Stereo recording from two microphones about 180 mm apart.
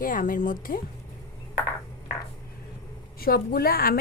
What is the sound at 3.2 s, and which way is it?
Speech, 55° left (ahead or behind).